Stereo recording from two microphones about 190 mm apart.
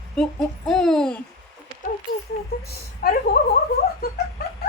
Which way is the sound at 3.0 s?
55° left (ahead or behind).